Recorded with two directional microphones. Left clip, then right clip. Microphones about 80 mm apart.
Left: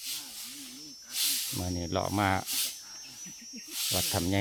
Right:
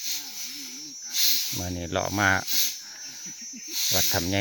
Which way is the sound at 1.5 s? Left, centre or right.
Centre.